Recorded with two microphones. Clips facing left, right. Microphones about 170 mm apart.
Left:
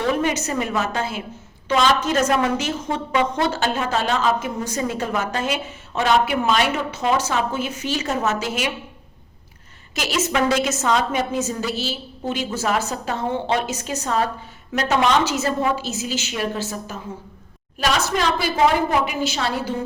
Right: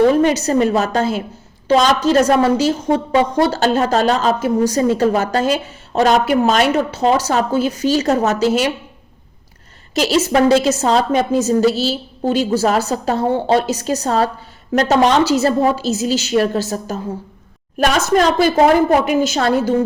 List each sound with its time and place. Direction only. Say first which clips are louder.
0.1 s a woman's voice: right 8 dB; 35° right (ahead or behind)
9.9 s a woman's voice: right 8 dB; 35° right (ahead or behind)